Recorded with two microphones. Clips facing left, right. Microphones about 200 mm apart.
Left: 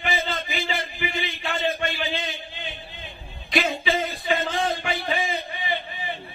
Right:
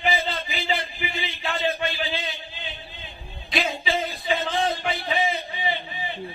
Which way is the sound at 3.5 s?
50° left (ahead or behind).